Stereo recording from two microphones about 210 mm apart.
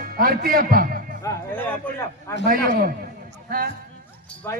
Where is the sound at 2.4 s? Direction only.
40° right (ahead or behind).